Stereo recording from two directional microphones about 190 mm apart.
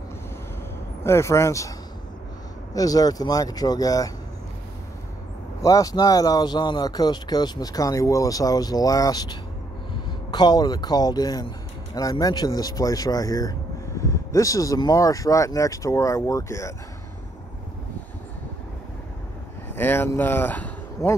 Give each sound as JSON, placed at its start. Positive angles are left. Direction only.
{"t": 1.0, "sound": "speech", "side_deg": 15}
{"t": 2.7, "sound": "speech", "side_deg": 20}
{"t": 5.6, "sound": "speech", "side_deg": 15}
{"t": 19.7, "sound": "speech", "side_deg": 10}